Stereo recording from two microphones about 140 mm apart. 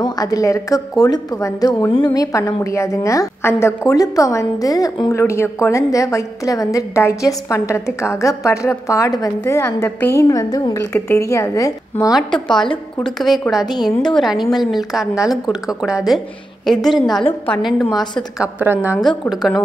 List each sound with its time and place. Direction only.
0.0 s a woman's voice: 25° left (ahead or behind)
1.9 s a woman's voice: 40° left (ahead or behind)
2.1 s a woman's voice: 20° left (ahead or behind)
12.1 s a woman's voice: centre (ahead or behind)
12.4 s a woman's voice: 30° left (ahead or behind)
13.0 s a woman's voice: centre (ahead or behind)
18.4 s a woman's voice: 15° right (ahead or behind)